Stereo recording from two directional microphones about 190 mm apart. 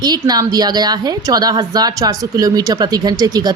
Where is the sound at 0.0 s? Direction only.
20° right (ahead or behind).